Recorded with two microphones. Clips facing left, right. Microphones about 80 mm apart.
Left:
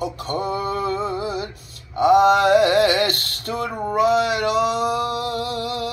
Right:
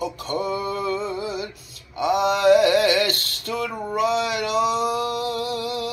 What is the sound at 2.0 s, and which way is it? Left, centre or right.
Male singing, left.